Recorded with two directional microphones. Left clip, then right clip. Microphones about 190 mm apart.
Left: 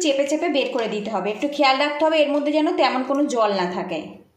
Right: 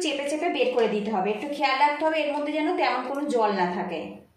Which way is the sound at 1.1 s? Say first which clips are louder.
Left 3 dB; 40° left (ahead or behind).